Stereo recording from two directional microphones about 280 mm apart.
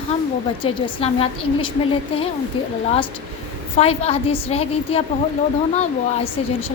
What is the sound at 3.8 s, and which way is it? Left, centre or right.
A woman's voice, left.